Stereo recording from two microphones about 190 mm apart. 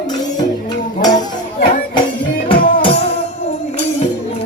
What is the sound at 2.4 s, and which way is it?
Music, 25° left (ahead or behind).